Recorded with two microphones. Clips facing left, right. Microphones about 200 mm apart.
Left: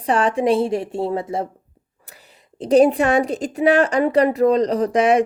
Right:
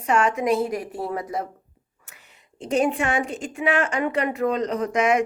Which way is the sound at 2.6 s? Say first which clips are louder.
Left 8 dB; 35° left (ahead or behind).